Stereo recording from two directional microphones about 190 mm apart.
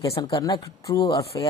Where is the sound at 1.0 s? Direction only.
30° left (ahead or behind).